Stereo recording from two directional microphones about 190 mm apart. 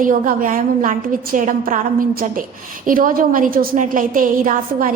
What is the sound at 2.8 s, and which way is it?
A woman's voice, 45° right (ahead or behind).